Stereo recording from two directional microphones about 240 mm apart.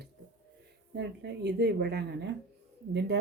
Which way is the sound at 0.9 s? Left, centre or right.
Right.